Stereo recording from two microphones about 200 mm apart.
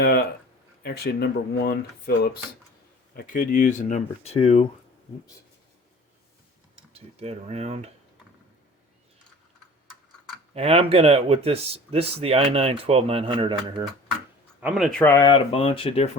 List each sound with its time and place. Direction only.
0.0 s speech: 50° left (ahead or behind); by 4.6 s 30° left (ahead or behind)
6.9 s speech: 30° right (ahead or behind)
10.5 s speech: 30° right (ahead or behind)
14.6 s speech: centre (ahead or behind)
15.0 s speech: 15° left (ahead or behind)